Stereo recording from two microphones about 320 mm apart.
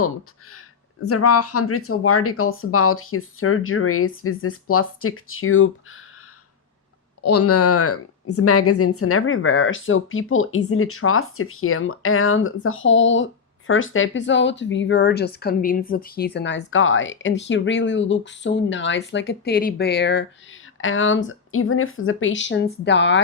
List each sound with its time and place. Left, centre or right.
1.0 s speech: left
7.2 s speech: left